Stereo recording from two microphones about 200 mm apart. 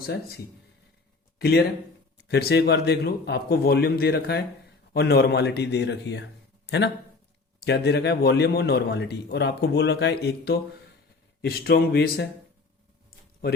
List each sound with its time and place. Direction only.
0.0 s a man's voice: 50° left (ahead or behind)
1.4 s a man's voice: 50° left (ahead or behind)